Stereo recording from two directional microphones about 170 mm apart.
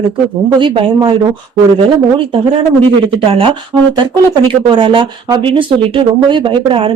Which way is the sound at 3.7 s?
20° right (ahead or behind).